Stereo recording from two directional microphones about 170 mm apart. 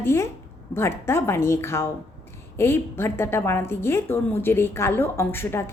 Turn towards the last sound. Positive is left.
turn(degrees=15)  # may be behind; listen again after turning